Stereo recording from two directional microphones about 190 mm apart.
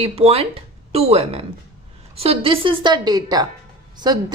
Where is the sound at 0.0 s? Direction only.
30° right (ahead or behind).